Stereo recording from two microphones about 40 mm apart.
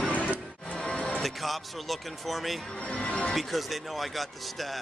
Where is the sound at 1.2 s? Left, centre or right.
Centre.